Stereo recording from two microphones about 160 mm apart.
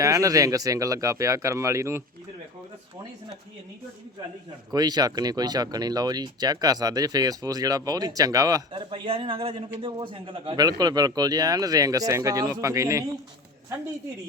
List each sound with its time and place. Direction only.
0.0 s a man's voice: 20° right (ahead or behind)
4.7 s a man's voice: 25° right (ahead or behind)
8.8 s a man's voice: 35° right (ahead or behind); by 13.1 s 20° right (ahead or behind)